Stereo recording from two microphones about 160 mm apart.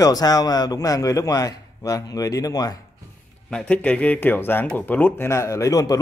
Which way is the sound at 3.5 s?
5° left (ahead or behind).